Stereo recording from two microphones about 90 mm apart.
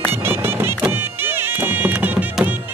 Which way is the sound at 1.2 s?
20° right (ahead or behind).